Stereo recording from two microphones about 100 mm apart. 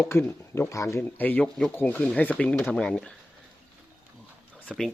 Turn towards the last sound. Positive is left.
turn(degrees=10)  # may be behind; listen again after turning